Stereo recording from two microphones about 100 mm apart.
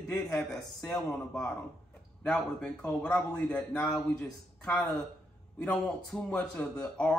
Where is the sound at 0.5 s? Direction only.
10° left (ahead or behind).